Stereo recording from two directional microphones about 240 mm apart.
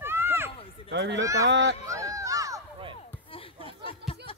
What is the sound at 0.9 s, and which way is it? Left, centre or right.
Speech, right.